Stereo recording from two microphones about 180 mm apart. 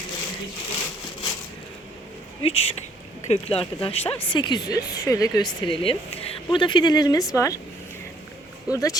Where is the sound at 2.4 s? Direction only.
35° left (ahead or behind); by 5.4 s 20° left (ahead or behind).